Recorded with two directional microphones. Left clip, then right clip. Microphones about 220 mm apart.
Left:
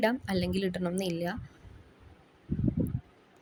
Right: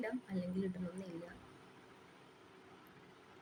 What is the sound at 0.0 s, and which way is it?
Speech, 50° left (ahead or behind).